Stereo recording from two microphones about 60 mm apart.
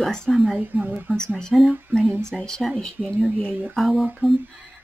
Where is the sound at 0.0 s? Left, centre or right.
Centre.